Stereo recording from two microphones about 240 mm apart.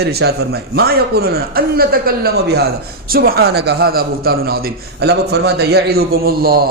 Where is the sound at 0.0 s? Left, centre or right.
Right.